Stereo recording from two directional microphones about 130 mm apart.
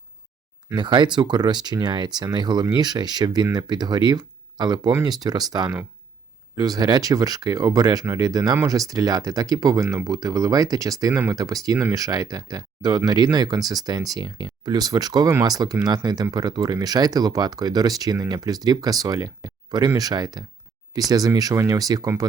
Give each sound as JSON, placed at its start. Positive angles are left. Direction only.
{"t": 0.8, "sound": "speech", "side_deg": -40}